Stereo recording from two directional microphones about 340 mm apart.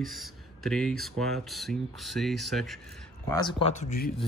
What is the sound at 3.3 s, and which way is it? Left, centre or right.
Speech, centre.